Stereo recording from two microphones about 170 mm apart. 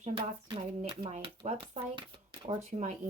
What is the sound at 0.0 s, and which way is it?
Speech, 30° right (ahead or behind).